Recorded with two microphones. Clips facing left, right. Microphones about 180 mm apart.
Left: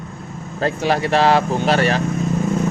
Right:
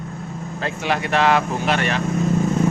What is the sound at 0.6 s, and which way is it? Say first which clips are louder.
Speech: left 5 dB; 40° left (ahead or behind).